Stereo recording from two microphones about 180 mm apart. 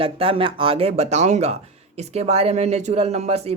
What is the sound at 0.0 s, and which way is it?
Speech, 30° right (ahead or behind).